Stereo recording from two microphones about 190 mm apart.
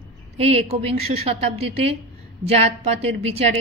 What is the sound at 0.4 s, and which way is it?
A woman's voice, 35° right (ahead or behind).